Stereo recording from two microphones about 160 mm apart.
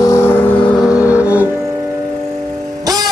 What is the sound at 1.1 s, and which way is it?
Music, 10° right (ahead or behind).